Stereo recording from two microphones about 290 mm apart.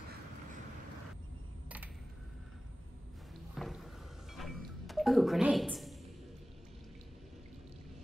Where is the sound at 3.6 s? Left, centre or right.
Centre.